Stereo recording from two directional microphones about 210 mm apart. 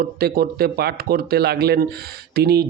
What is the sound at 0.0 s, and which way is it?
Speech, 45° right (ahead or behind).